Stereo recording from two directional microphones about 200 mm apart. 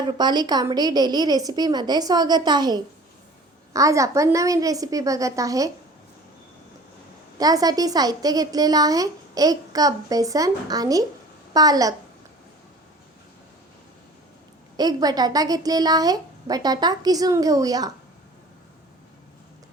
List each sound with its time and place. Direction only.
0.0 s a woman's voice: 20° right (ahead or behind)
7.3 s a woman's voice: 20° right (ahead or behind)
14.8 s a woman's voice: 20° right (ahead or behind)